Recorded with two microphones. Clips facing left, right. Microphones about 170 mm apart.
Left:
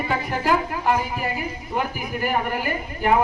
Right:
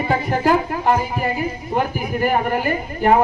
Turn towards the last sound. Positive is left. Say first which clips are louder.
# right 5 dB
turn(degrees=-40)  # may be behind; listen again after turning